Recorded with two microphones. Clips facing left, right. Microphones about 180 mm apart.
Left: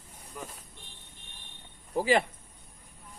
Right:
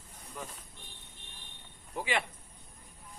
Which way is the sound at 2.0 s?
40° left (ahead or behind).